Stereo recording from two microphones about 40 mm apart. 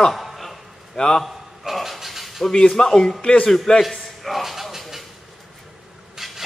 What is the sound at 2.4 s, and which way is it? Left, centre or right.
A man's voice, centre.